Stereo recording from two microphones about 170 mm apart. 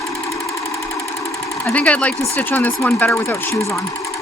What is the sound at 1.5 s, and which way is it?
Speech, 10° left (ahead or behind).